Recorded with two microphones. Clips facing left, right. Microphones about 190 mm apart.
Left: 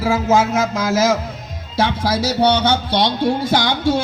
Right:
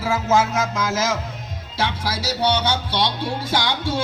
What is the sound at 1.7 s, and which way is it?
Music, 45° left (ahead or behind).